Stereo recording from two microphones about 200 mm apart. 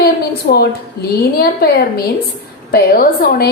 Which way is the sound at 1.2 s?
50° left (ahead or behind).